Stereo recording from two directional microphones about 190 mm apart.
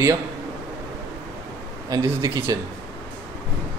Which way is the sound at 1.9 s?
20° right (ahead or behind).